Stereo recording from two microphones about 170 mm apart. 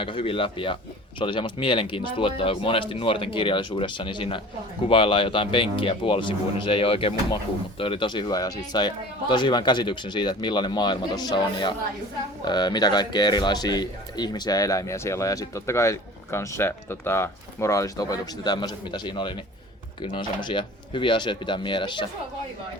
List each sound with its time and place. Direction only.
0.0 s speech: 30° left (ahead or behind)